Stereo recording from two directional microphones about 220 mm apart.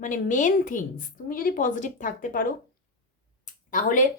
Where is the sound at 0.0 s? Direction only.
35° left (ahead or behind).